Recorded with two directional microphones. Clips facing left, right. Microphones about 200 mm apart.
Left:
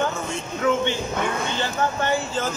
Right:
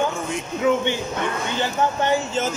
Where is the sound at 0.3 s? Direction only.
15° right (ahead or behind).